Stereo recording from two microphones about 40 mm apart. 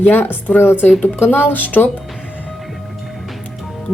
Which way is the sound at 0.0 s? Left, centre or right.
Left.